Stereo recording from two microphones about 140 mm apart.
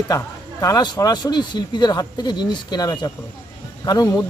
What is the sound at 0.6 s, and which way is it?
A man's voice, 30° left (ahead or behind).